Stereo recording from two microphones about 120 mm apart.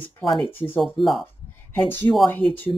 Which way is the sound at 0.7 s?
Centre (ahead or behind).